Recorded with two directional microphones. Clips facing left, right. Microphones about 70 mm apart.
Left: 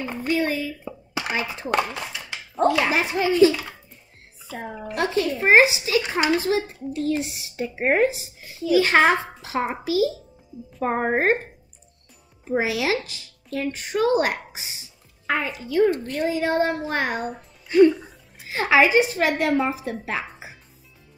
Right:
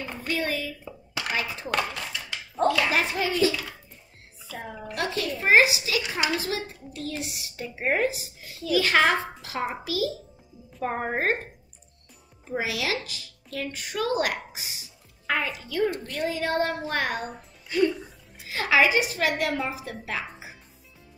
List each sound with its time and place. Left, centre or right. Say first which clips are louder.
0.0 s a sound: left 6 dB; left
2.6 s a child's voice: left 3 dB; left
4.6 s speech: left 5 dB; left
10.8 s speech: left 5 dB; left
12.4 s speech: left 6 dB; left; by 17.0 s centre
17.1 s speech: left 4 dB; centre
17.6 s a woman's voice: left 9 dB; left